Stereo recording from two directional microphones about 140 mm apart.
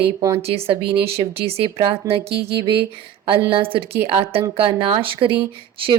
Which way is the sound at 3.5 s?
40° right (ahead or behind).